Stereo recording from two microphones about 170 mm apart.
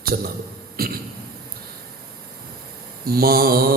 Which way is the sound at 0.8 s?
60° right (ahead or behind).